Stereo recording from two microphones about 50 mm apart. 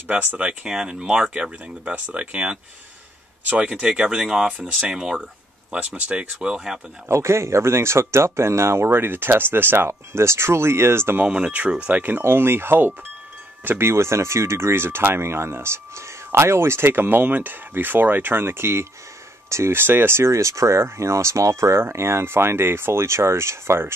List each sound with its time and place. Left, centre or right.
0.1 s speech: right
0.5 s speech: centre
7.1 s speech: right
9.8 s speech: right
11.2 s speech: right
12.2 s speech: right
21.7 s speech: right